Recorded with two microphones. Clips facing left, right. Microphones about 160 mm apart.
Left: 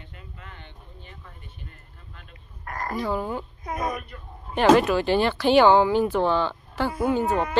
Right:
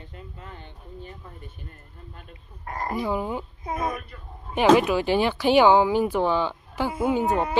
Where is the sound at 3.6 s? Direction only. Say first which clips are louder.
Right 1 dB; 25° right (ahead or behind).